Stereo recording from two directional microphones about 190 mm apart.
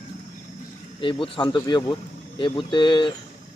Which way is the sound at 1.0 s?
30° left (ahead or behind).